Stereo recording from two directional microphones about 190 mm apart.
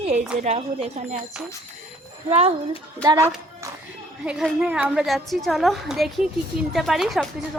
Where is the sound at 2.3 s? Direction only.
35° right (ahead or behind).